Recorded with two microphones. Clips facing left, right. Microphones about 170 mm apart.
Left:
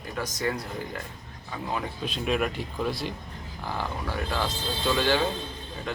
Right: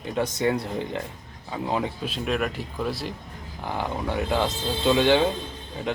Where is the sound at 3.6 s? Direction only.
20° right (ahead or behind).